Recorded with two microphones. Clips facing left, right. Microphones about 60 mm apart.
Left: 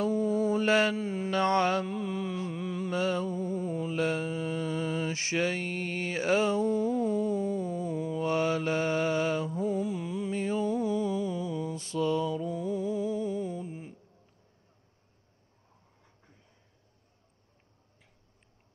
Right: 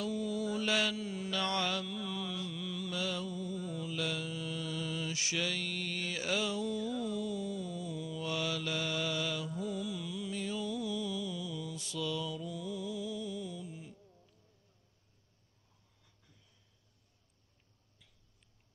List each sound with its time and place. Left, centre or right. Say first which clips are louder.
0.0 s mantra: left 8 dB; left